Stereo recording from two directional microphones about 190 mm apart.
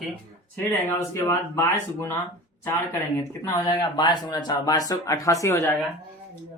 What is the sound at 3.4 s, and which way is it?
Speech, 20° left (ahead or behind).